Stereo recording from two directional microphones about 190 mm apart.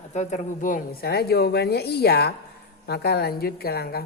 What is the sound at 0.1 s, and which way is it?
A woman's voice, 40° left (ahead or behind).